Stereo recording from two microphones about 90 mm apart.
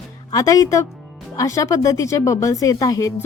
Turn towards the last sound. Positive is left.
turn(degrees=40)  # may be behind; listen again after turning